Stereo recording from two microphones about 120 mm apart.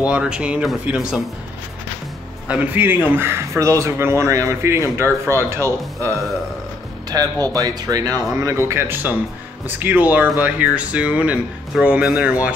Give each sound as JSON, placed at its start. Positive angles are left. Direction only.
{"t": 0.0, "sound": "speech", "side_deg": -10}
{"t": 2.4, "sound": "a man's voice", "side_deg": -10}